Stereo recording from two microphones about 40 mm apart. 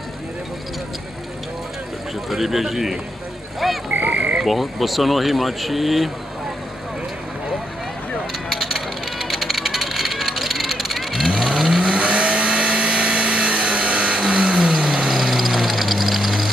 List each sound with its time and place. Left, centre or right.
2.2 s a man's voice: centre
3.9 s goose: right
4.5 s speech: centre
8.5 s vehicle: centre
11.4 s vehicle: centre
11.8 s vehicle: right
15.0 s a sound: centre